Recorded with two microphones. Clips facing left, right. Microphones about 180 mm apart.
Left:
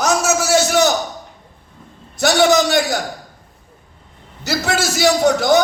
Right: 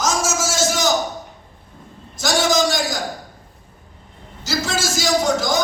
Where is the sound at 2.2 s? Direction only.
65° left (ahead or behind).